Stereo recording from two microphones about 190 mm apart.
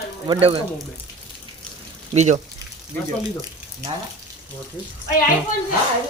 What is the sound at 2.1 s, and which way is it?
Speech, 35° right (ahead or behind).